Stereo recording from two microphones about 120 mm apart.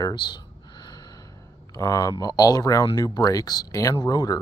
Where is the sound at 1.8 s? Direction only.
25° left (ahead or behind).